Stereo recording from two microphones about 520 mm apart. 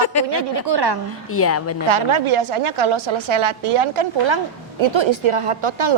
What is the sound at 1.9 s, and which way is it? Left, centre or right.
A woman's voice, right.